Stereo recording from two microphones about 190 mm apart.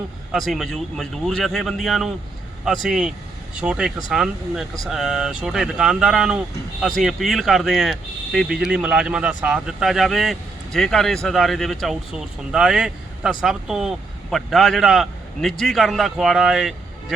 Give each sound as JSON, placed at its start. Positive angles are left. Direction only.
{"t": 0.3, "sound": "speech", "side_deg": 0}